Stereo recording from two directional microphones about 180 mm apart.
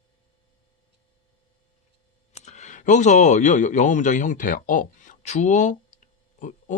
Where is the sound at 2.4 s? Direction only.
40° left (ahead or behind).